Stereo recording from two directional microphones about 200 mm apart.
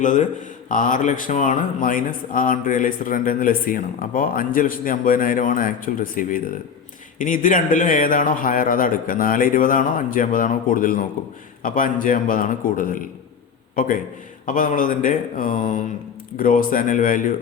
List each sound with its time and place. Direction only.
0.0 s speech: 40° left (ahead or behind)